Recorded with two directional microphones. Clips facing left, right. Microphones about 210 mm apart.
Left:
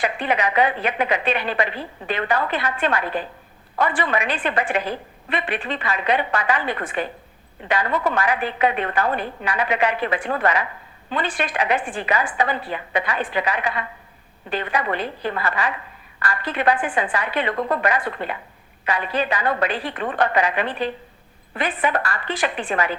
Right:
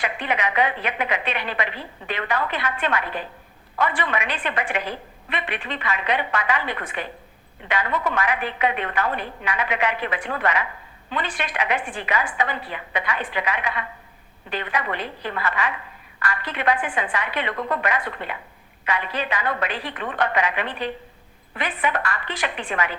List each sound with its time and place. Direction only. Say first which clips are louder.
0.0 s a woman's voice: left 3 dB; 35° left (ahead or behind)